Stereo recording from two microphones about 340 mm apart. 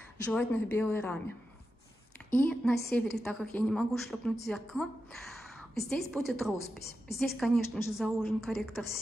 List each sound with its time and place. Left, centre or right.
0.3 s a woman's voice: centre
2.3 s a woman's voice: centre
5.9 s a woman's voice: centre